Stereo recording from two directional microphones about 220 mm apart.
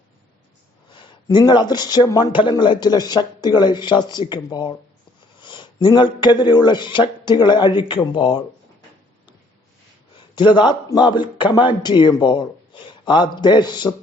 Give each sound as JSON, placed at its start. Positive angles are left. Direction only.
{"t": 0.9, "sound": "speech", "side_deg": 20}
{"t": 10.3, "sound": "speech", "side_deg": 20}